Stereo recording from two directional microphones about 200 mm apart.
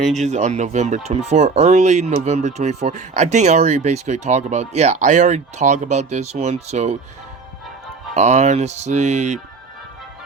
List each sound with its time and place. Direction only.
0.1 s speech: 35° right (ahead or behind)
8.1 s speech: 35° right (ahead or behind)